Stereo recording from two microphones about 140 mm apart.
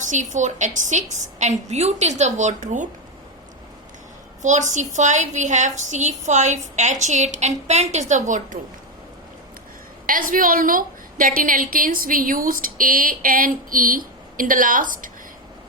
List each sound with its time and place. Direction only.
0.1 s a woman's voice: 60° right (ahead or behind)
4.4 s a woman's voice: 60° right (ahead or behind)
10.1 s a woman's voice: 75° right (ahead or behind)